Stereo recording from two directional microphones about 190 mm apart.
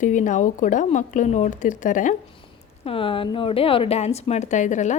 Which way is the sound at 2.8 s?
30° left (ahead or behind).